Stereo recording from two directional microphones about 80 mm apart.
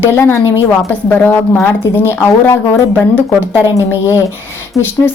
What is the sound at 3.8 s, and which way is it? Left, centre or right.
Speech, right.